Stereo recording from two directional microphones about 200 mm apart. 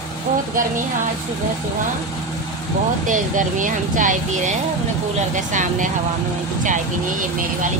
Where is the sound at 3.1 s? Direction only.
40° right (ahead or behind).